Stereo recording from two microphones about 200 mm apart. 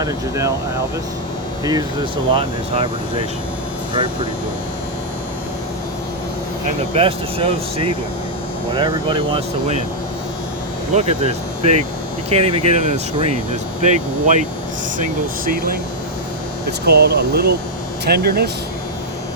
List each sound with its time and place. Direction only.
0.0 s speech: 15° right (ahead or behind)
2.3 s speech: 30° right (ahead or behind)
6.9 s speech: 30° right (ahead or behind)
10.9 s speech: 35° right (ahead or behind)
15.4 s speech: 45° right (ahead or behind)
16.8 s speech: 50° right (ahead or behind)